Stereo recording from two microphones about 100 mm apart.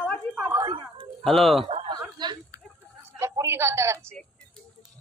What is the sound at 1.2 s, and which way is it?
Speech, centre (ahead or behind).